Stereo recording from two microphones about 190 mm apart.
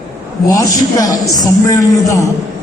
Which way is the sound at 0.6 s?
20° left (ahead or behind).